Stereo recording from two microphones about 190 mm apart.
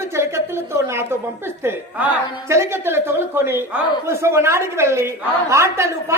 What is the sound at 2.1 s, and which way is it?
A woman's voice, 15° right (ahead or behind).